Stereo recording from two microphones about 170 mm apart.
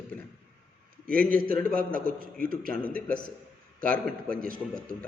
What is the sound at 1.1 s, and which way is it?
A man's voice, 60° right (ahead or behind).